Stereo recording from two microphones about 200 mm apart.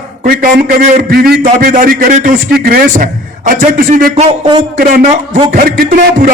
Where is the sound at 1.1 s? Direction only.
50° right (ahead or behind).